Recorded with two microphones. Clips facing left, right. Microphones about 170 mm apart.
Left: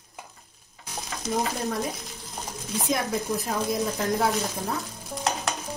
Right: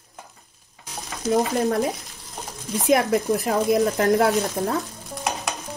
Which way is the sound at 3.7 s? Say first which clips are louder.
Right 7 dB; 65° right (ahead or behind).